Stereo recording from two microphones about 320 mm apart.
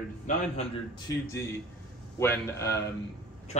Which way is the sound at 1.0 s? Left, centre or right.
Centre.